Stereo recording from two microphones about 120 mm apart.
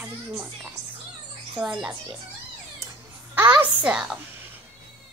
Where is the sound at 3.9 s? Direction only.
10° right (ahead or behind).